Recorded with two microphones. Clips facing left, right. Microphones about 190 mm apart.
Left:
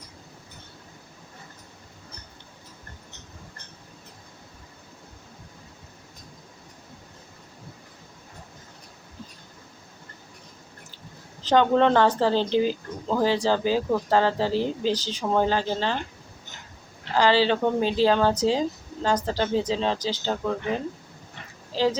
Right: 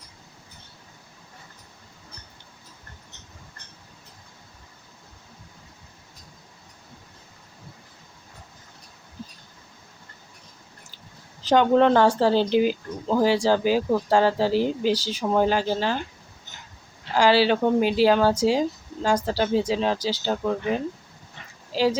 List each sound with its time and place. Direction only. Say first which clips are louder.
11.4 s speech: right 2 dB; 10° right (ahead or behind)
17.2 s speech: right 2 dB; 10° right (ahead or behind)
21.7 s speech: right 1 dB; 10° right (ahead or behind)